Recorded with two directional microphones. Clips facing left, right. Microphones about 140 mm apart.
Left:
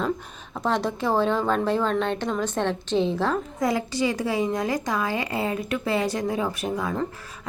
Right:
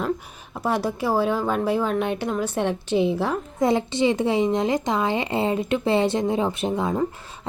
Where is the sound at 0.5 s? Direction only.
10° right (ahead or behind).